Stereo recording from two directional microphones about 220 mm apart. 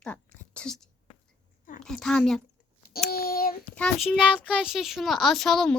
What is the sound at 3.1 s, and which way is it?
Child singing, 45° left (ahead or behind).